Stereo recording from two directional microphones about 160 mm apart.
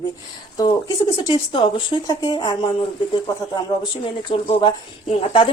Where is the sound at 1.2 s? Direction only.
30° left (ahead or behind).